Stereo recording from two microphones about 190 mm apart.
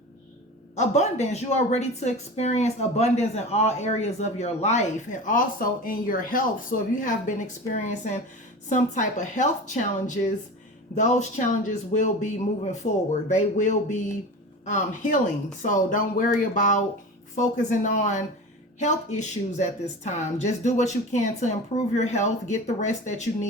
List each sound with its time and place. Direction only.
0.8 s a woman's voice: 35° left (ahead or behind)
10.9 s a woman's voice: 40° left (ahead or behind)